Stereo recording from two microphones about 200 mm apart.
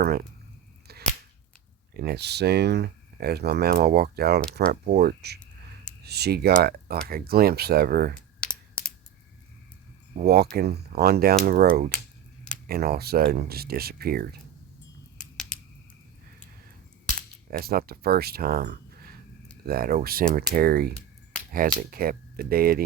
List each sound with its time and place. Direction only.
0.0 s speech: 50° right (ahead or behind)
0.9 s cap gun: 50° right (ahead or behind)
1.9 s speech: 50° right (ahead or behind)
8.4 s a sound: 5° left (ahead or behind)
10.2 s speech: 50° right (ahead or behind)
17.5 s speech: 50° right (ahead or behind)